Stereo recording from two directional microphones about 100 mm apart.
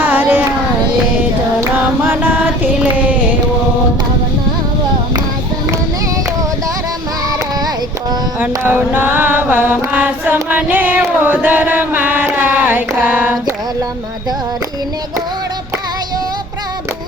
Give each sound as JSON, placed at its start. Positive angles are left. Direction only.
{"t": 0.0, "sound": "carnatic music", "side_deg": -20}
{"t": 1.7, "sound": "mantra", "side_deg": -20}
{"t": 8.4, "sound": "mantra", "side_deg": -20}
{"t": 10.5, "sound": "a sound", "side_deg": -15}